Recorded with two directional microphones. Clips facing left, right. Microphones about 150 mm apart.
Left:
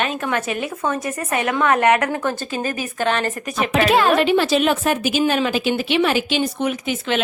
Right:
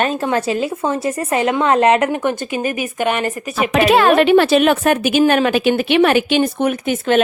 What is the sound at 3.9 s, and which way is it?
A woman's voice, 65° right (ahead or behind).